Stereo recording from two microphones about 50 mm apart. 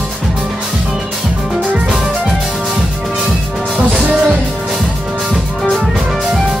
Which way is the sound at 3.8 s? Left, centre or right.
Centre.